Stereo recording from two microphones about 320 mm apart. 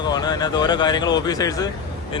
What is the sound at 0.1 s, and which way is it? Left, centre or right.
Speech, centre.